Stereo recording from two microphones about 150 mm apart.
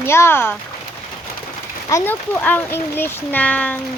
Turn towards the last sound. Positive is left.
turn(degrees=10)  # may be behind; listen again after turning